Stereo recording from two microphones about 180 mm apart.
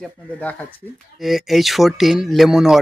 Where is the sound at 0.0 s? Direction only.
10° left (ahead or behind).